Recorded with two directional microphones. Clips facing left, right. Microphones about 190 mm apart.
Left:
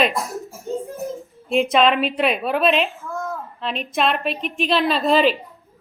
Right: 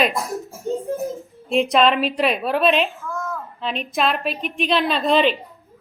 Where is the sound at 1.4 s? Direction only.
Centre (ahead or behind).